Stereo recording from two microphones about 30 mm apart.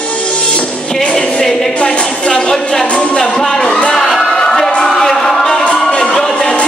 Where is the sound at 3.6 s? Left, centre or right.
Left.